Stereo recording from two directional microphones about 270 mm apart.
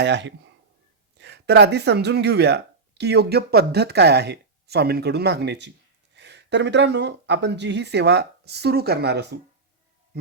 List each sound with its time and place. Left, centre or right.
0.0 s speech: right